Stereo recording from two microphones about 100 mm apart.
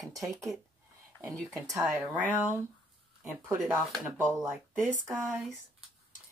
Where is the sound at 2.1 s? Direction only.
25° right (ahead or behind).